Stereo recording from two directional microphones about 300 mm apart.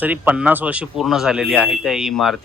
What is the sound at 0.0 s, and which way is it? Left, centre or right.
Speech, centre.